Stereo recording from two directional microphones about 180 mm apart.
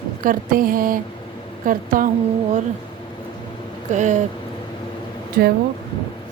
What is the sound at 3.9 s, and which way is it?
Speech, 40° right (ahead or behind).